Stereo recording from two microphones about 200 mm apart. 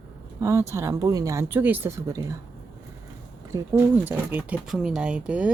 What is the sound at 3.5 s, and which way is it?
Speech, 15° right (ahead or behind).